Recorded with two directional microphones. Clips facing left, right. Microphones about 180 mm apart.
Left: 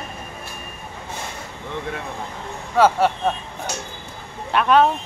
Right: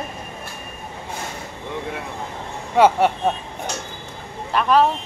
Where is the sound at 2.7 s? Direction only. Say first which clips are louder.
Right 1 dB; 20° right (ahead or behind).